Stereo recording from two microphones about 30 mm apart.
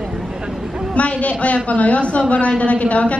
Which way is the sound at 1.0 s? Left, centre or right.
Left.